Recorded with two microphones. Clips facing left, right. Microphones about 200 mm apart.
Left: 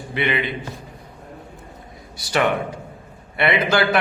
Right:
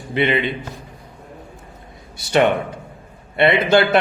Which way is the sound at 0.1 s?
25° right (ahead or behind).